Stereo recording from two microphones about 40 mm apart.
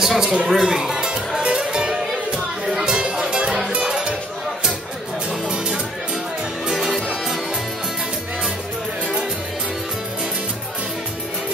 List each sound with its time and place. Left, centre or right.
0.0 s speech: centre
0.5 s music: centre
3.4 s music: centre